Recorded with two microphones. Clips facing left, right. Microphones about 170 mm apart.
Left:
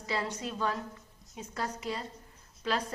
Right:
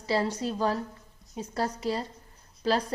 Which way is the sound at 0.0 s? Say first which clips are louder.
Right 7 dB; 35° right (ahead or behind).